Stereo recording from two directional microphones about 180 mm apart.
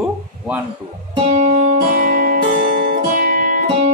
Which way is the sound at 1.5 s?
55° right (ahead or behind).